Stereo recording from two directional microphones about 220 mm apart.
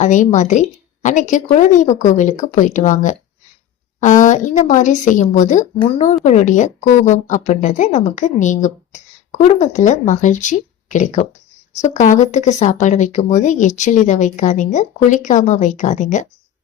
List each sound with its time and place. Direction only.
0.0 s a woman's voice: 35° left (ahead or behind)